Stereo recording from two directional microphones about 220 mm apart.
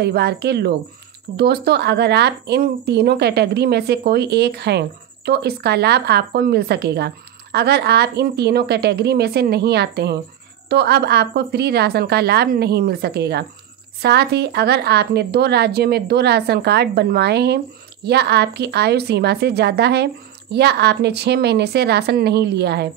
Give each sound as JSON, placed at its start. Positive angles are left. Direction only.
{"t": 0.0, "sound": "speech", "side_deg": -45}